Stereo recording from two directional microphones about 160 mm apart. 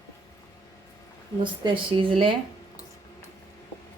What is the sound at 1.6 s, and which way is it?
Speech, 35° right (ahead or behind).